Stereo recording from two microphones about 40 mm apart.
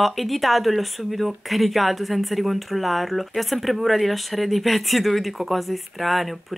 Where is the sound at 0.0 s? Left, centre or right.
Centre.